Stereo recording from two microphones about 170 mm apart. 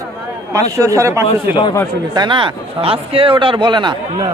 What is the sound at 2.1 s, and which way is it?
A man's voice, 25° right (ahead or behind).